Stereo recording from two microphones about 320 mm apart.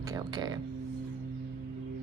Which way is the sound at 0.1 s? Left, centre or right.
Centre.